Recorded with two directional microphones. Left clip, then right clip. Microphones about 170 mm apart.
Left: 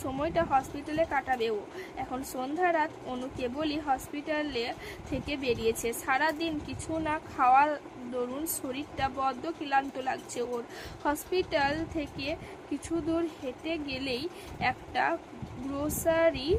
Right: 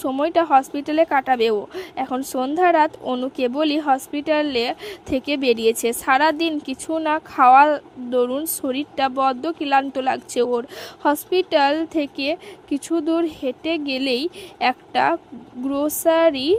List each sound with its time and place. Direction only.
0.0 s a woman's voice: 45° right (ahead or behind)